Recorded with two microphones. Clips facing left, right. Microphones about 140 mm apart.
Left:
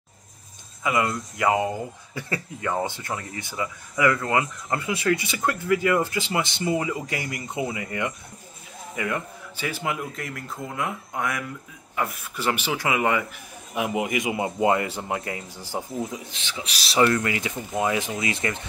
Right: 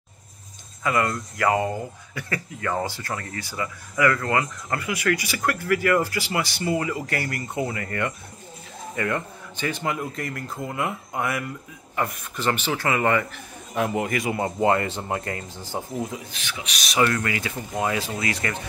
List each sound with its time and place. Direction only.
0.8 s speech: 15° left (ahead or behind)
2.1 s speech: 25° left (ahead or behind); by 15.8 s 10° left (ahead or behind)
16.1 s speech: 25° left (ahead or behind)